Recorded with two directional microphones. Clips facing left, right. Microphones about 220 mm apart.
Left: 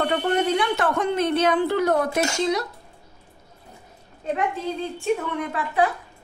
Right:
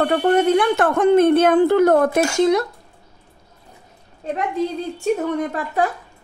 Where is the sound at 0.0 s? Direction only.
50° right (ahead or behind).